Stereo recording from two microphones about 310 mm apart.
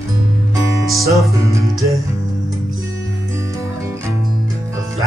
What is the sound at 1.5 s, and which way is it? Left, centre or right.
Speech, centre.